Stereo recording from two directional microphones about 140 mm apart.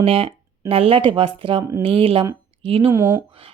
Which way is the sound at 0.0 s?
40° right (ahead or behind).